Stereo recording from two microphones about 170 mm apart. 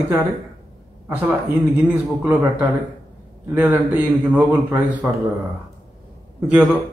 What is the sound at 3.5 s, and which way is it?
A man's voice, 10° right (ahead or behind).